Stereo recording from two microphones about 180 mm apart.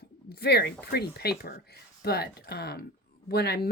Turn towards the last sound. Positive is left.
turn(degrees=65)  # may be behind; listen again after turning